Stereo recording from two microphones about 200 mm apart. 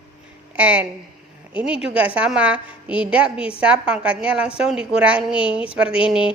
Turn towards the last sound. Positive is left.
turn(degrees=-5)  # may be behind; listen again after turning